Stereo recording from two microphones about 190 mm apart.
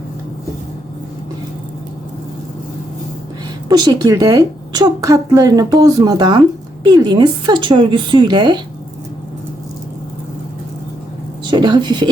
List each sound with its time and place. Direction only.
3.7 s a woman's voice: 20° right (ahead or behind)
11.4 s speech: 25° right (ahead or behind)